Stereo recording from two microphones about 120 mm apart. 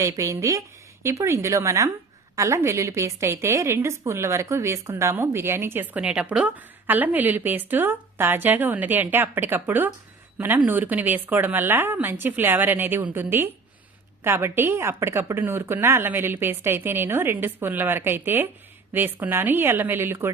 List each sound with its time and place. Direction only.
0.0 s a woman's voice: 25° right (ahead or behind)